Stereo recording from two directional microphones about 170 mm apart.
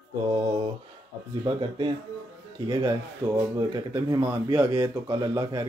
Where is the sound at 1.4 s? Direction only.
30° right (ahead or behind).